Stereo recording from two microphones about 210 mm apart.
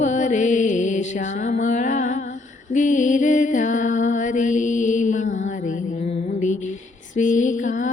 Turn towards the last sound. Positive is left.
turn(degrees=35)  # may be behind; listen again after turning